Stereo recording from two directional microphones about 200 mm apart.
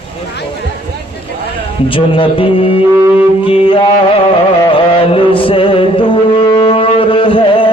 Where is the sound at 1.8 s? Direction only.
25° left (ahead or behind).